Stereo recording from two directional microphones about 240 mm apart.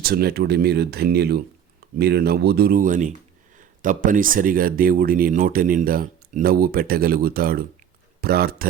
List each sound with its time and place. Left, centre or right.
0.0 s speech: right